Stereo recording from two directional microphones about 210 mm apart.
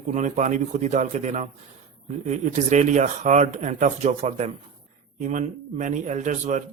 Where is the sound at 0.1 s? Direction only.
35° right (ahead or behind).